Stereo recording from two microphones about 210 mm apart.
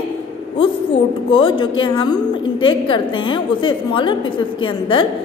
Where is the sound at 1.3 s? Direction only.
25° left (ahead or behind).